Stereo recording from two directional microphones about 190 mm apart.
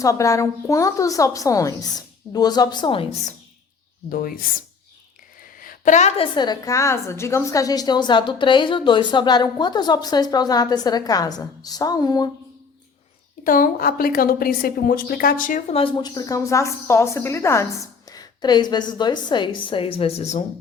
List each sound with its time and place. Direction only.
0.0 s a woman's voice: 15° left (ahead or behind); by 3.3 s 30° left (ahead or behind)
4.1 s a woman's voice: 50° left (ahead or behind)
5.5 s a woman's voice: 45° left (ahead or behind); by 12.3 s 20° left (ahead or behind)
13.4 s a woman's voice: 45° left (ahead or behind)
15.7 s a woman's voice: 25° left (ahead or behind)